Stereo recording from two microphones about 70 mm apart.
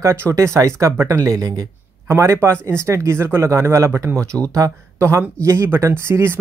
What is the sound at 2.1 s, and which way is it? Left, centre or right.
Speech, right.